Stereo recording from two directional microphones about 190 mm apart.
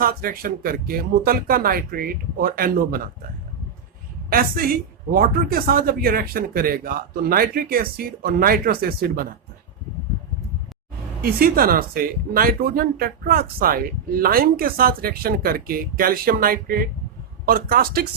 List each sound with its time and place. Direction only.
0.0 s a woman's voice: 50° right (ahead or behind)
4.3 s a woman's voice: 50° right (ahead or behind)
11.2 s a woman's voice: 50° right (ahead or behind)